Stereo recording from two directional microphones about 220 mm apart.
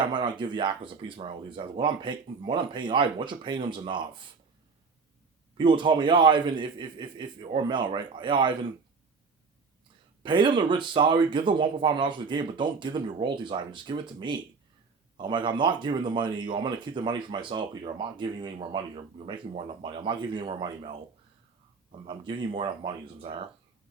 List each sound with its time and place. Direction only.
0.0 s speech: 20° right (ahead or behind)
5.5 s speech: 20° right (ahead or behind)
10.2 s speech: 20° right (ahead or behind)
22.0 s speech: 20° right (ahead or behind)